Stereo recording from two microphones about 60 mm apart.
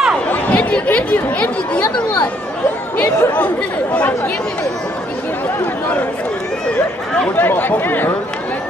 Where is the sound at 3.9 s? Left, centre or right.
Left.